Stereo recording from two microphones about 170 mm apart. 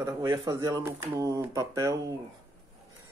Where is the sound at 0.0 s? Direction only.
20° right (ahead or behind).